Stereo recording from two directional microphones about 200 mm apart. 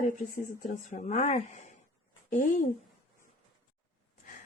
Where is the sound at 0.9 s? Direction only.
35° left (ahead or behind).